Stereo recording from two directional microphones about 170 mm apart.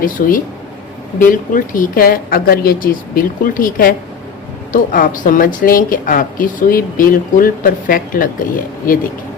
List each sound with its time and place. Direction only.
0.0 s a woman's voice: 55° left (ahead or behind)